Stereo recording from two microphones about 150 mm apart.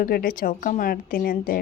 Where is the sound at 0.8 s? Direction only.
80° left.